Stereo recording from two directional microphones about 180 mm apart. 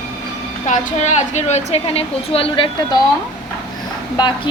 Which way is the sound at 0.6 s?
40° left (ahead or behind).